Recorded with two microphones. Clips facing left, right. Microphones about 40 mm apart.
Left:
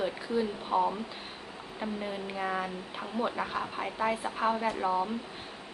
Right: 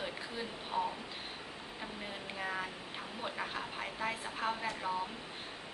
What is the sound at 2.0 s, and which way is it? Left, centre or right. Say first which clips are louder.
Speech: left 5 dB; centre.